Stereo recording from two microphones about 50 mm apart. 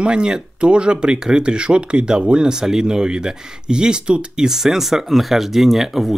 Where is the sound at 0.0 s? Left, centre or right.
Centre.